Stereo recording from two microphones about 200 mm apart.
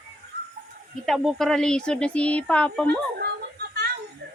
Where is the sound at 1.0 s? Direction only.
Centre (ahead or behind).